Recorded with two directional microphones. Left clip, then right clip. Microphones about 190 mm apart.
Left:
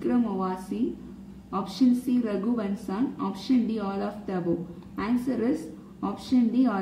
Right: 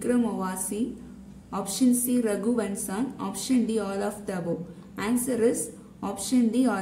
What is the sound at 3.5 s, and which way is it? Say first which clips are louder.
A woman's voice: right 1 dB; 35° right (ahead or behind).